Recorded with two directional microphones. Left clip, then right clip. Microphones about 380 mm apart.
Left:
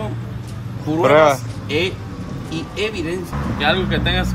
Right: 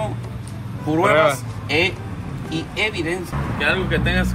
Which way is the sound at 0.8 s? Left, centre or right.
Centre.